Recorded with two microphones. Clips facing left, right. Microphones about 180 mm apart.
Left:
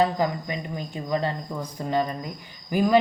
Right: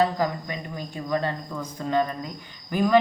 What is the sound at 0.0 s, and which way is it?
Speech, 15° left (ahead or behind).